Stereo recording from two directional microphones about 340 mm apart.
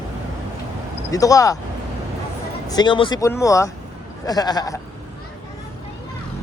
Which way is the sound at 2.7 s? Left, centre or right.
Centre.